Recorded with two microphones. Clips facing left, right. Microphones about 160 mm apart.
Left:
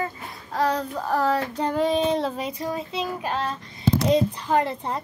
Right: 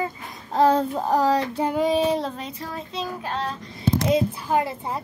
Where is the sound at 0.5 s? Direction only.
25° right (ahead or behind).